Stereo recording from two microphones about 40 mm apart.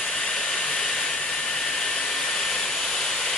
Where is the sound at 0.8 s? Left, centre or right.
Centre.